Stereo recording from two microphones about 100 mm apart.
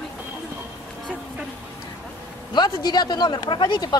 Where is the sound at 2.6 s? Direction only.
45° left (ahead or behind).